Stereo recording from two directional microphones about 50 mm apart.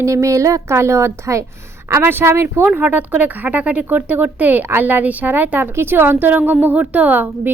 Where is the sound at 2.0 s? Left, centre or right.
Right.